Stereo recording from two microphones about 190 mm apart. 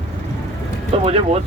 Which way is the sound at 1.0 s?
30° right (ahead or behind).